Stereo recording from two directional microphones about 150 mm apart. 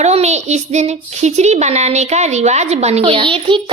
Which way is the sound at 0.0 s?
45° right (ahead or behind).